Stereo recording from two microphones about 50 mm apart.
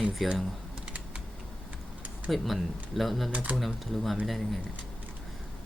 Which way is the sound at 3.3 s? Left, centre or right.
Right.